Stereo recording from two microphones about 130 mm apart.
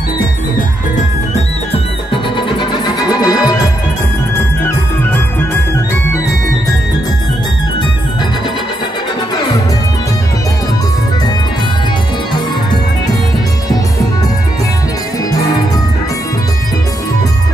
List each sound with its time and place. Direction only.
2.6 s music: 35° left (ahead or behind)
4.4 s music: 15° left (ahead or behind)